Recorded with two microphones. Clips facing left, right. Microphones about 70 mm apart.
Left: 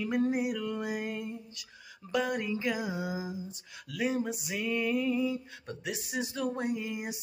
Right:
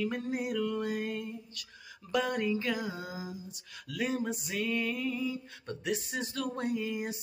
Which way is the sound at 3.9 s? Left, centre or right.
Centre.